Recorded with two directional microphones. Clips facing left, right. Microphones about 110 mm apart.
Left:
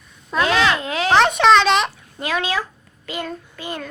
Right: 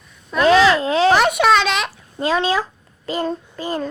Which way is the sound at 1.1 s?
10° right (ahead or behind).